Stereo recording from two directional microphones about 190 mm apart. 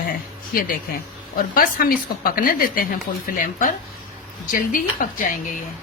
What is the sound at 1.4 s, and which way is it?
A woman's voice, 50° left (ahead or behind).